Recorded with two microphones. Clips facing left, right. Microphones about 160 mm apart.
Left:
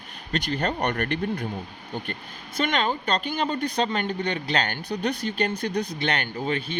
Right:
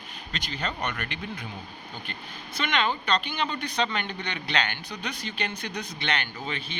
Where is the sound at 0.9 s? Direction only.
45° left (ahead or behind).